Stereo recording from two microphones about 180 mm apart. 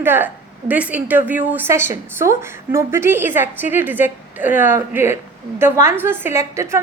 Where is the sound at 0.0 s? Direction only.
10° right (ahead or behind).